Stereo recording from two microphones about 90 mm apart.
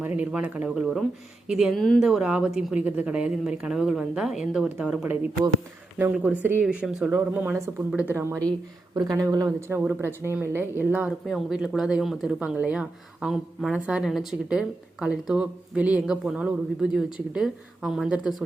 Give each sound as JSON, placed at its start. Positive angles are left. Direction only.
{"t": 0.0, "sound": "speech", "side_deg": -15}
{"t": 1.7, "sound": "speech", "side_deg": 5}
{"t": 6.2, "sound": "speech", "side_deg": -20}
{"t": 6.7, "sound": "speech", "side_deg": -10}
{"t": 7.1, "sound": "speech", "side_deg": -25}
{"t": 8.1, "sound": "speech", "side_deg": -30}
{"t": 9.0, "sound": "speech", "side_deg": -45}
{"t": 9.6, "sound": "speech", "side_deg": -30}
{"t": 11.3, "sound": "speech", "side_deg": 0}
{"t": 13.2, "sound": "speech", "side_deg": -5}